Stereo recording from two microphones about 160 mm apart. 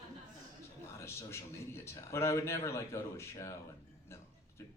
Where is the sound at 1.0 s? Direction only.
15° left (ahead or behind).